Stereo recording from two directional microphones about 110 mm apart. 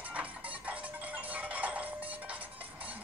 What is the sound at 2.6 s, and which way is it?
Music, 55° right (ahead or behind).